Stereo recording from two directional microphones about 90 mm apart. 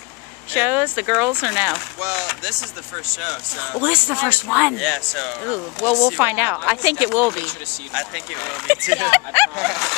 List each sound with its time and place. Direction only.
0.5 s speech: 20° right (ahead or behind)
1.7 s speech: 5° right (ahead or behind)
3.8 s speech: 15° right (ahead or behind)
4.7 s speech: 5° right (ahead or behind)
6.1 s speech: 20° right (ahead or behind)
7.9 s speech: 5° right (ahead or behind)
8.6 s speech: 10° right (ahead or behind)
9.1 s speech: 25° right (ahead or behind)
9.6 s speech: 5° right (ahead or behind)